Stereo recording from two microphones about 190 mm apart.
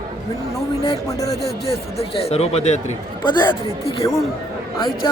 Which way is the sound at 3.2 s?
25° left (ahead or behind).